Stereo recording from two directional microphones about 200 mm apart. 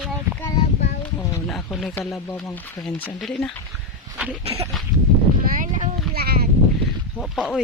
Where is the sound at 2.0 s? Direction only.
15° left (ahead or behind).